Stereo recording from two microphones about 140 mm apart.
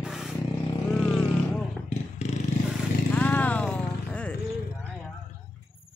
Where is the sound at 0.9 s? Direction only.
5° left (ahead or behind).